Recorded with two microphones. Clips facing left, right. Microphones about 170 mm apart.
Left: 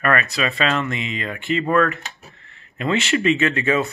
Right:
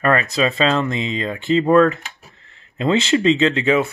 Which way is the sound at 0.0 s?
25° right (ahead or behind).